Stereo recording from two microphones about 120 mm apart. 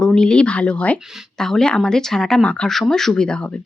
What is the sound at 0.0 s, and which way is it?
Speech, 5° left (ahead or behind).